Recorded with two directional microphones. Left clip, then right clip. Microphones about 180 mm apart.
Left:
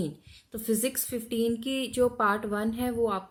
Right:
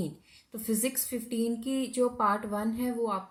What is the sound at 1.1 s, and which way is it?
A woman's voice, 30° left (ahead or behind).